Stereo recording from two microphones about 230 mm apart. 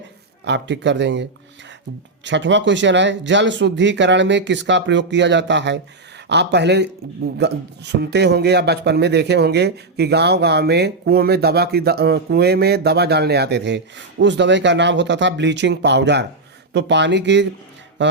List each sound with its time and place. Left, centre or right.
0.4 s speech: right
18.0 s music: right